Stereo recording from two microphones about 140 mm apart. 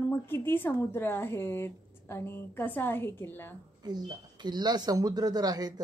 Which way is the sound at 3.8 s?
30° right (ahead or behind).